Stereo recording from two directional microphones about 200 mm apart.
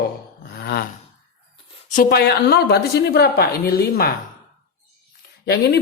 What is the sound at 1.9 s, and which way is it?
A woman's voice, 45° left (ahead or behind).